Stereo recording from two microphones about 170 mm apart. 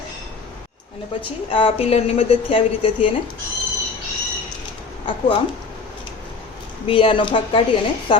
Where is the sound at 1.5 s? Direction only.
30° left (ahead or behind).